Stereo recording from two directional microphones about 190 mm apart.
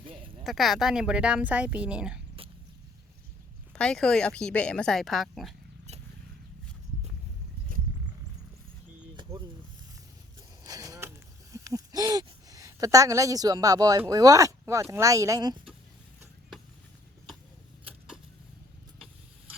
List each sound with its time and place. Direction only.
0.4 s speech: centre (ahead or behind)
3.7 s speech: 5° left (ahead or behind)
10.6 s a sound: 20° right (ahead or behind)
11.5 s speech: 15° right (ahead or behind)